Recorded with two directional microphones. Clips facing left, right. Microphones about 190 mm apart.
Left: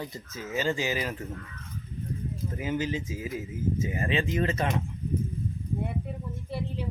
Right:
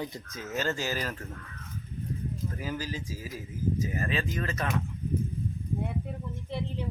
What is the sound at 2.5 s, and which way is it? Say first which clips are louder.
Speech: left 9 dB; 20° left (ahead or behind).